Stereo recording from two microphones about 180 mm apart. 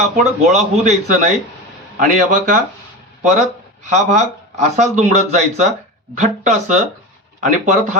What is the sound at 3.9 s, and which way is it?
A man's voice, 40° right (ahead or behind).